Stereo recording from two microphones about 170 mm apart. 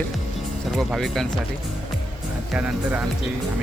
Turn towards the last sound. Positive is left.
turn(degrees=-5)  # may be behind; listen again after turning